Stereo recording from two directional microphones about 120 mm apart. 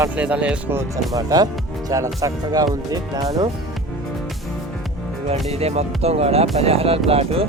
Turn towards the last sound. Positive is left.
turn(degrees=-55)  # may be behind; listen again after turning